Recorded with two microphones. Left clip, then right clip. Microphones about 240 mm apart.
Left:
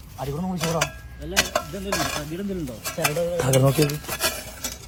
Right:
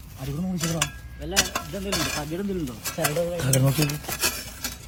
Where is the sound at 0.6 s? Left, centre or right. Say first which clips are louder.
Left 4 dB; centre.